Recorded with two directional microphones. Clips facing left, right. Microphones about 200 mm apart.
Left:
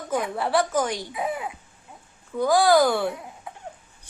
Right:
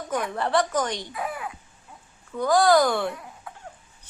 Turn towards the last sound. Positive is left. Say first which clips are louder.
# left 2 dB
turn(degrees=20)  # may be behind; listen again after turning